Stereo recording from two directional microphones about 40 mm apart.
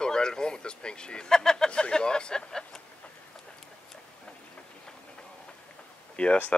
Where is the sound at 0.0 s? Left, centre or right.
Centre.